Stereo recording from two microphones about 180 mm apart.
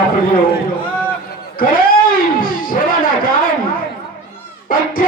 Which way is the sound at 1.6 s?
50° left (ahead or behind).